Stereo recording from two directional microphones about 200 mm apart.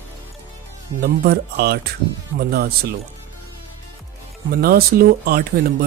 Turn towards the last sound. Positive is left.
turn(degrees=-50)  # may be behind; listen again after turning